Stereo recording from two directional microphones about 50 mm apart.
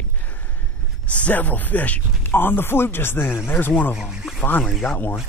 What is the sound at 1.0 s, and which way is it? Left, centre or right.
Speech, left.